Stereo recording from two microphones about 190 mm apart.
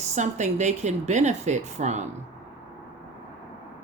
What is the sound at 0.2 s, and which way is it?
Speech, 40° right (ahead or behind).